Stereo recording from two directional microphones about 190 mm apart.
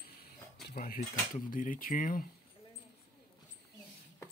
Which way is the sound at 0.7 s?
50° left (ahead or behind).